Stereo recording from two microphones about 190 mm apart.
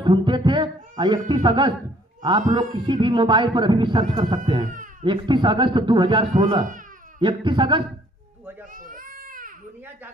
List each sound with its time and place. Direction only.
0.0 s music: 25° right (ahead or behind)
1.3 s speech: 25° right (ahead or behind)
8.7 s baby cry: 45° right (ahead or behind)